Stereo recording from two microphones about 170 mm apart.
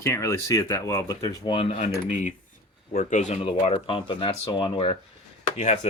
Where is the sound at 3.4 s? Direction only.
35° left (ahead or behind).